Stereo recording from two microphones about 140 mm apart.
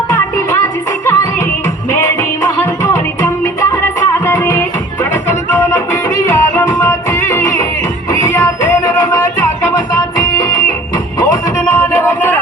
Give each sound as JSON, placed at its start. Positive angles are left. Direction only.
{"t": 0.5, "sound": "music", "side_deg": 20}